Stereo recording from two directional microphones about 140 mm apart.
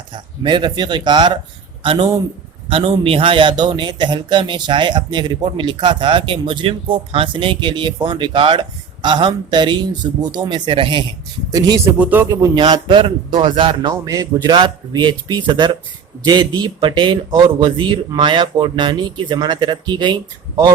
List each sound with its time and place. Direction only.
0.4 s a man's voice: 30° right (ahead or behind)
11.9 s speech: 10° right (ahead or behind)
12.5 s a man's voice: 35° right (ahead or behind)
13.9 s a man's voice: 25° right (ahead or behind)